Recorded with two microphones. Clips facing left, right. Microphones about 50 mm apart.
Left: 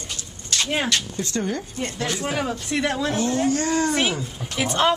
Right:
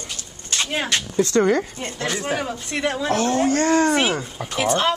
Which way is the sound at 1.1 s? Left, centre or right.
Right.